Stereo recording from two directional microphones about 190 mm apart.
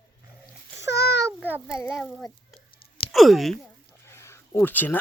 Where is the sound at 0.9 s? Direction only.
60° left (ahead or behind).